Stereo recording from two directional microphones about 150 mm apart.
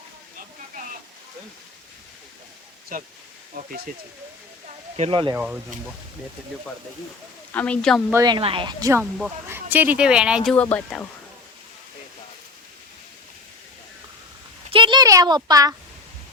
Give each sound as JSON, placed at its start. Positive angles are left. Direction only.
{"t": 2.9, "sound": "speech", "side_deg": -70}
{"t": 4.9, "sound": "speech", "side_deg": -40}
{"t": 5.3, "sound": "speech", "side_deg": -10}
{"t": 7.5, "sound": "a woman's voice", "side_deg": 10}
{"t": 8.1, "sound": "speech", "side_deg": -25}
{"t": 8.4, "sound": "speech", "side_deg": -35}
{"t": 8.8, "sound": "speech", "side_deg": -15}
{"t": 10.5, "sound": "speech", "side_deg": 10}
{"t": 14.7, "sound": "a sound", "side_deg": -35}